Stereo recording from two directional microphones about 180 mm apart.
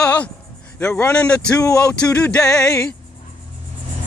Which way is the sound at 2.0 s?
5° left (ahead or behind).